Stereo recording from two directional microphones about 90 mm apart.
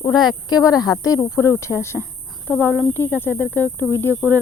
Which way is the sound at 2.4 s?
15° left (ahead or behind).